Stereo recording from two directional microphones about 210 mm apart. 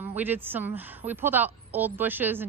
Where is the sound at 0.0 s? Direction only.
10° right (ahead or behind).